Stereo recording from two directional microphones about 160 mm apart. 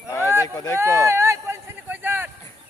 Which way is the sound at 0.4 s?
25° left (ahead or behind).